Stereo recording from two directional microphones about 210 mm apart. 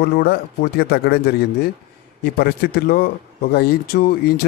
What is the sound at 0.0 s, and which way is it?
Speech, 50° left (ahead or behind).